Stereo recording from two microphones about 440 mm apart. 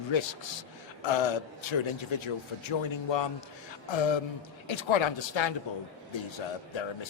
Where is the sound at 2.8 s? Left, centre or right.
Left.